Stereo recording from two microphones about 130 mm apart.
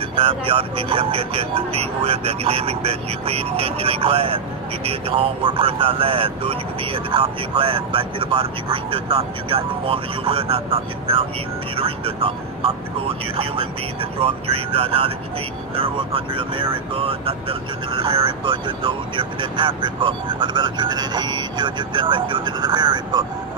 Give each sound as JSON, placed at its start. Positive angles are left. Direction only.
{"t": 0.1, "sound": "speech", "side_deg": -45}